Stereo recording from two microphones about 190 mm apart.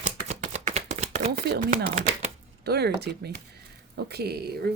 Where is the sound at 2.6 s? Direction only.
60° right (ahead or behind).